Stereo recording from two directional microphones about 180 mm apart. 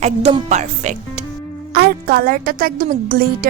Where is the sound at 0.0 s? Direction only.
35° right (ahead or behind).